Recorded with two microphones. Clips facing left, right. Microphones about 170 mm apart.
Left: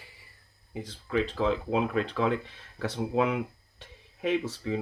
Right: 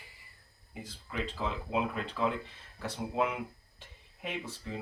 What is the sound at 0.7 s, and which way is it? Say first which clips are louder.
Speech: left 12 dB; 85° left.